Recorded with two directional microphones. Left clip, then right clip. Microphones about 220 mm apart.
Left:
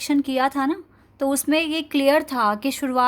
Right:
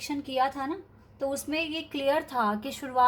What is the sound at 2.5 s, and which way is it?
Speech, 90° left.